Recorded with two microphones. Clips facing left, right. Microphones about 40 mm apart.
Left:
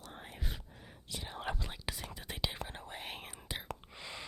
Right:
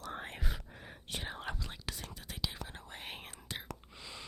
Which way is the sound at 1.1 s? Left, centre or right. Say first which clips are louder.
Right 3 dB; right.